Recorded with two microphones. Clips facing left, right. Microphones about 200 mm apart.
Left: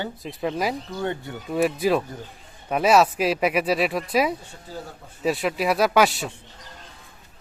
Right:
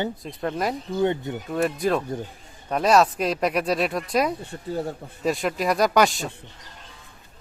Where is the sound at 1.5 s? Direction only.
5° left (ahead or behind).